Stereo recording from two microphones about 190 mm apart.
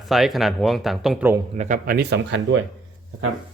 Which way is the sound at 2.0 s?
65° right (ahead or behind).